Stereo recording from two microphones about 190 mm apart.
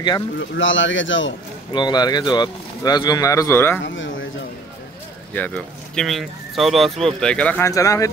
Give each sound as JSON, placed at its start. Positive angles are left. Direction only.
{"t": 0.4, "sound": "speech", "side_deg": 80}
{"t": 1.7, "sound": "speech", "side_deg": 20}
{"t": 3.8, "sound": "a sound", "side_deg": 80}
{"t": 5.3, "sound": "speech", "side_deg": 5}